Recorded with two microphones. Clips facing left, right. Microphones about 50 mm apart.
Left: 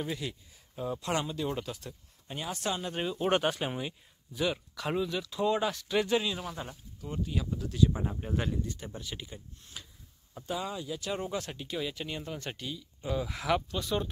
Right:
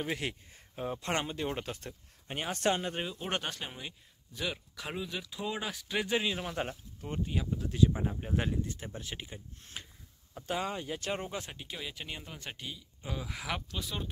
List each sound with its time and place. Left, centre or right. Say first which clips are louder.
0.1 s speech: right 1 dB; right
2.2 s speech: right 3 dB; right
2.9 s speech: left 6 dB; centre
3.8 s speech: left 6 dB; centre; by 6.5 s right
7.0 s speech: left 1 dB; right
7.3 s speech: even; right
8.0 s speech: even; centre
8.4 s speech: even; right
10.4 s speech: right 1 dB; right
11.1 s speech: left 4 dB; right
13.1 s speech: left 7 dB; centre